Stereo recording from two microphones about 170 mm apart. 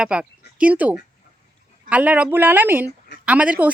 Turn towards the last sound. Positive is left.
turn(degrees=-10)  # may be behind; listen again after turning